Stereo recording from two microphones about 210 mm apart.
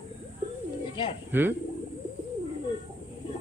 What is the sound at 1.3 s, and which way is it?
Speech, 10° right (ahead or behind).